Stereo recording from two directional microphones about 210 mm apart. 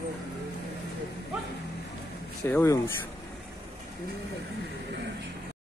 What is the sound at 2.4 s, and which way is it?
Speech, 15° left (ahead or behind).